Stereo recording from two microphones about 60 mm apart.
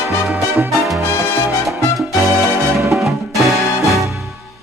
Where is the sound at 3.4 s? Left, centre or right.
Centre.